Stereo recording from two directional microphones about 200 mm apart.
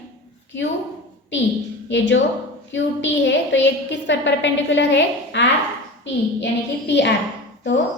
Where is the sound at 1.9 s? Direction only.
65° left (ahead or behind).